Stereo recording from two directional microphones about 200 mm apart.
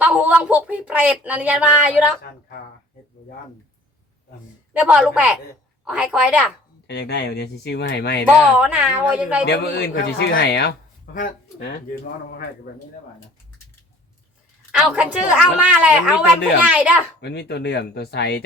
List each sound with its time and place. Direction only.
0.0 s speech: 5° right (ahead or behind)
4.7 s a woman's voice: 5° right (ahead or behind)
6.8 s speech: 55° left (ahead or behind)
8.5 s speech: 5° right (ahead or behind)
9.5 s speech: 55° left (ahead or behind)
14.7 s a woman's voice: 5° right (ahead or behind)
17.2 s speech: 55° left (ahead or behind)